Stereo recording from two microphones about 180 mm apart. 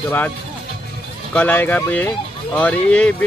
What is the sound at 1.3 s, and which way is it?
Speech, 10° left (ahead or behind).